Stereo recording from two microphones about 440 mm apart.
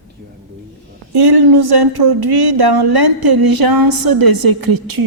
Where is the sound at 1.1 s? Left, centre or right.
Right.